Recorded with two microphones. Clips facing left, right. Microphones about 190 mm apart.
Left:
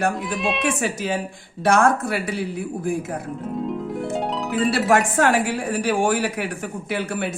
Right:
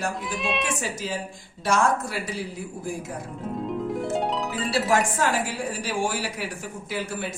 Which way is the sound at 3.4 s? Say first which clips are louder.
Even; centre (ahead or behind).